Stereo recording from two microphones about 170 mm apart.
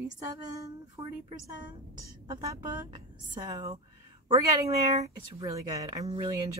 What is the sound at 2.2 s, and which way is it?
A woman's voice, 25° right (ahead or behind).